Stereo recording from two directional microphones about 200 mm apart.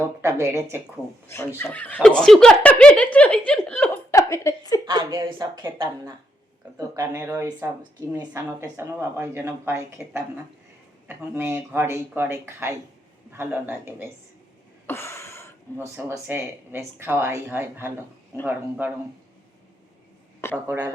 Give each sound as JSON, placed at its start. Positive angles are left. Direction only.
{"t": 0.2, "sound": "speech", "side_deg": -15}
{"t": 1.5, "sound": "speech", "side_deg": 10}
{"t": 4.9, "sound": "speech", "side_deg": -20}
{"t": 14.8, "sound": "a sound", "side_deg": 10}
{"t": 15.8, "sound": "speech", "side_deg": -15}
{"t": 20.7, "sound": "speech", "side_deg": -10}